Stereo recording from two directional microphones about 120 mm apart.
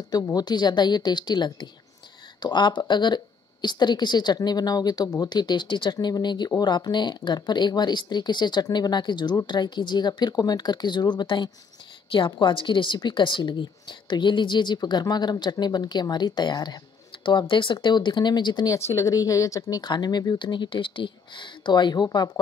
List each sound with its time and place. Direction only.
0.1 s a woman's voice: 35° left (ahead or behind)
18.8 s a woman's voice: 25° left (ahead or behind)